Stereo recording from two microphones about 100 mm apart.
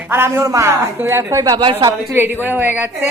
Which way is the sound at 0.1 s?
25° right (ahead or behind).